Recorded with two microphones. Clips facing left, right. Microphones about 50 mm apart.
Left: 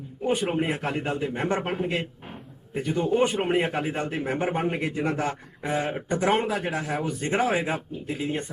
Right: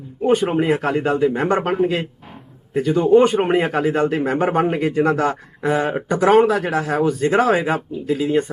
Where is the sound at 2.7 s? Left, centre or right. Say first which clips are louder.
Right 10 dB; right.